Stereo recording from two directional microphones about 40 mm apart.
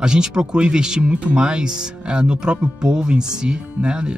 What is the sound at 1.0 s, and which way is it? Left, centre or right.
Speech, right.